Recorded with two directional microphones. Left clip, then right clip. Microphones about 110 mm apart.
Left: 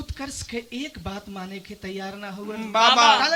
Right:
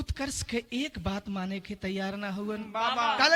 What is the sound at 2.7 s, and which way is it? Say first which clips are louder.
Speech: left 12 dB; 30° left (ahead or behind).